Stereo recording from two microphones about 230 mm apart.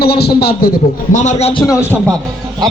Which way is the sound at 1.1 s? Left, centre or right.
Left.